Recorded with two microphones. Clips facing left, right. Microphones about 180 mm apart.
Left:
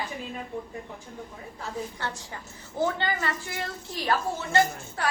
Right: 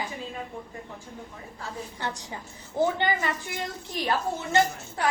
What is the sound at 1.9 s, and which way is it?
A woman's voice, 15° right (ahead or behind).